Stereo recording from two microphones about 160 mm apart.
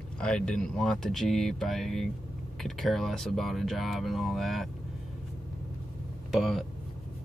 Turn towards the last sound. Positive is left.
turn(degrees=0)  # may be behind; listen again after turning